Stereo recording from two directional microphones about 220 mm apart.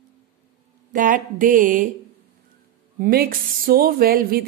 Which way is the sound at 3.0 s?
45° right (ahead or behind).